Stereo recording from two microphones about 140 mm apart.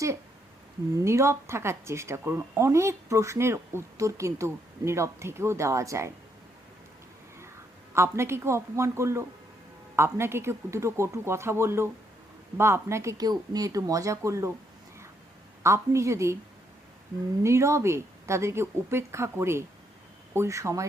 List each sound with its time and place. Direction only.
1.0 s speech: 20° right (ahead or behind)
7.9 s speech: 20° right (ahead or behind)
15.6 s speech: 20° right (ahead or behind)
17.4 s speech: 20° right (ahead or behind)